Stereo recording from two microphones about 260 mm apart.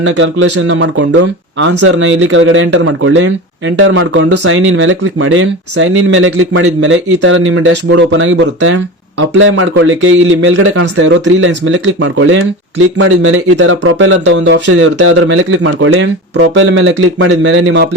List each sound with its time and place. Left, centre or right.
0.0 s speech: right